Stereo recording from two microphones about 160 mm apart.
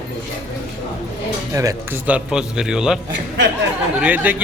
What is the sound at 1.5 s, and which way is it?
Speech, 20° right (ahead or behind).